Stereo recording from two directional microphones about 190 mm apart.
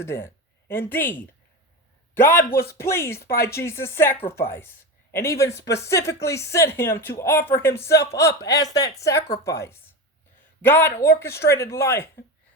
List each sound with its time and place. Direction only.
0.0 s a sound: 15° left (ahead or behind)
0.9 s speech: 10° left (ahead or behind)
2.1 s speech: 10° left (ahead or behind)